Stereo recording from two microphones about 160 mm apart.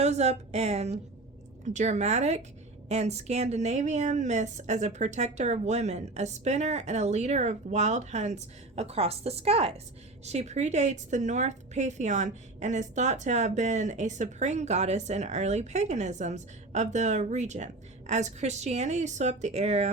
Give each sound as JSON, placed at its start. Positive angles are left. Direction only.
{"t": 0.0, "sound": "a woman's voice", "side_deg": -45}